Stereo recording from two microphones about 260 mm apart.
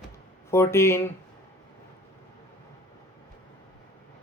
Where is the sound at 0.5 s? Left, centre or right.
Centre.